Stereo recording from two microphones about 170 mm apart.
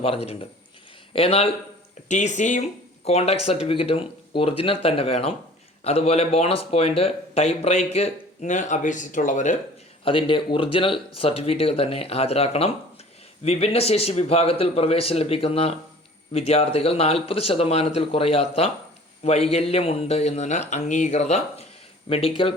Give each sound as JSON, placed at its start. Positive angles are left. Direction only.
{"t": 0.0, "sound": "speech", "side_deg": 35}
{"t": 2.0, "sound": "speech", "side_deg": 45}
{"t": 10.0, "sound": "speech", "side_deg": 30}